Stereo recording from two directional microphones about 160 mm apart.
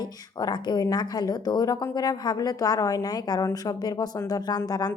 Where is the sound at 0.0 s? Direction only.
25° left (ahead or behind).